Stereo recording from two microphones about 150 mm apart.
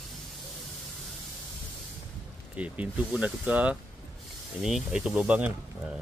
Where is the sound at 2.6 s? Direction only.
10° right (ahead or behind).